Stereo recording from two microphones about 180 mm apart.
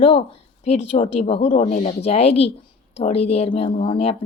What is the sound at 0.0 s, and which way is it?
A woman's voice, 30° left (ahead or behind).